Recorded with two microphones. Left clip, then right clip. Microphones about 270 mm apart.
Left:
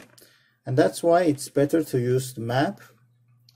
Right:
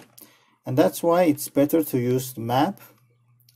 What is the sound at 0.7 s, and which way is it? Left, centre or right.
Speech, centre.